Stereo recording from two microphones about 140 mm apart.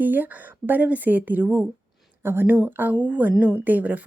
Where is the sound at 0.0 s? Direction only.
10° right (ahead or behind).